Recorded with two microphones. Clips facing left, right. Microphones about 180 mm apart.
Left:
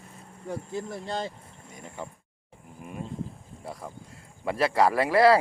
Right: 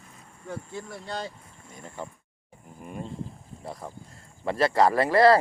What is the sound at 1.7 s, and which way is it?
Speech, 10° left (ahead or behind).